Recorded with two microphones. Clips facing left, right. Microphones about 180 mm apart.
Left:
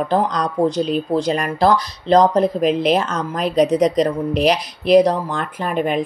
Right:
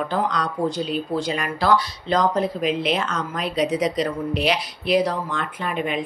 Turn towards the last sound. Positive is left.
turn(degrees=45)  # may be behind; listen again after turning